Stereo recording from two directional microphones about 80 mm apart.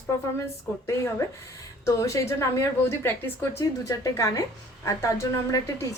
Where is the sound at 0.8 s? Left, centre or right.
Left.